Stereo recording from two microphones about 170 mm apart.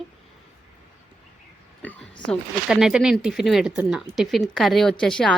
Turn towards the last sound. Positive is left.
turn(degrees=5)  # may be behind; listen again after turning